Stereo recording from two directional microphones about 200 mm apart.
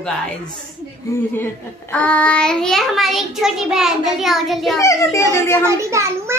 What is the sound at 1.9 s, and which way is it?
Child singing, 5° left (ahead or behind).